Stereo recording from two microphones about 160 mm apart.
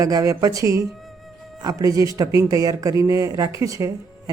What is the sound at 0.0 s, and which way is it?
Speech, 20° right (ahead or behind).